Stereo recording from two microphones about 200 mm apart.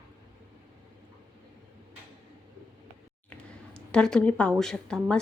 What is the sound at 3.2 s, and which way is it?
Speech, 5° left (ahead or behind).